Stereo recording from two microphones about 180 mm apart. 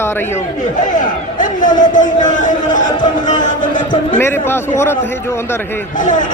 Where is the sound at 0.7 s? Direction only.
45° left (ahead or behind).